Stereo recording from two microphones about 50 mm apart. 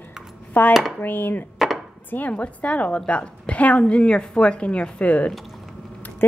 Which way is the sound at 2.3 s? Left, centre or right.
Left.